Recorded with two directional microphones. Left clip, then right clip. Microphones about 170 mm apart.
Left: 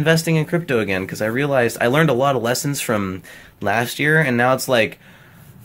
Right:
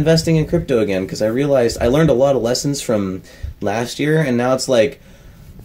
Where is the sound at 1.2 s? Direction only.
40° left (ahead or behind).